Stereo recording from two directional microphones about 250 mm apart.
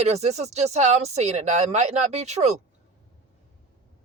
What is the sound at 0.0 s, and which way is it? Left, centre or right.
Speech, right.